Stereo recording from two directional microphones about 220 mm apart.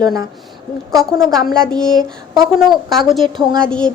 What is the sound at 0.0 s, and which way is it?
Speech, 15° right (ahead or behind).